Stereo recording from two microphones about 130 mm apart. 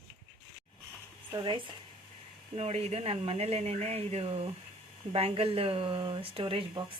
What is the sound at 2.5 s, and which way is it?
Speech, 50° right (ahead or behind).